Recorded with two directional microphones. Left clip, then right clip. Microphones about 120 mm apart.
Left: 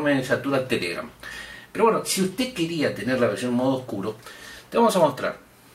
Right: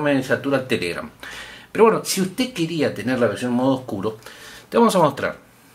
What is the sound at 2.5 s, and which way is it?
Speech, 30° right (ahead or behind).